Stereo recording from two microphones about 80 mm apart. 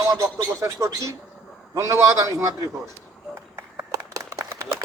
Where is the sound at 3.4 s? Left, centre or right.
Right.